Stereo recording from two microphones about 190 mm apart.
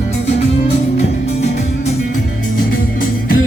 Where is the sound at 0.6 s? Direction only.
35° left (ahead or behind).